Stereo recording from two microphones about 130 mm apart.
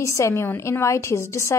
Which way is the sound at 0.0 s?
20° left (ahead or behind).